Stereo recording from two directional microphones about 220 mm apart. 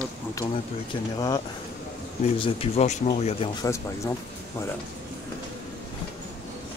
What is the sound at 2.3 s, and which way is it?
Speech, 25° left (ahead or behind).